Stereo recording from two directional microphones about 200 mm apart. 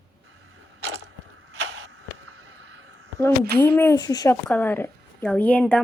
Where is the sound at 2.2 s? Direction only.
90° right.